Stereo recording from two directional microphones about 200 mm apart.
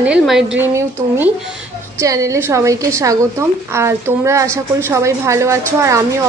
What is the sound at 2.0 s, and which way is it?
Speech, 15° right (ahead or behind).